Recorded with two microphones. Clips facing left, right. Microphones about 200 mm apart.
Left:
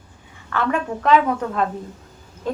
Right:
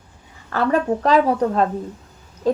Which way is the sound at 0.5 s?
35° right (ahead or behind).